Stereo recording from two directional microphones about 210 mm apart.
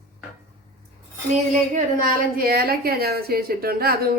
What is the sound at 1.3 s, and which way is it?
A woman's voice, 40° right (ahead or behind).